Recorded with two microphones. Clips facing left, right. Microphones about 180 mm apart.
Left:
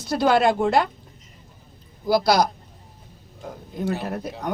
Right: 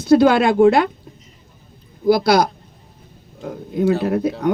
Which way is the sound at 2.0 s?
60° right (ahead or behind).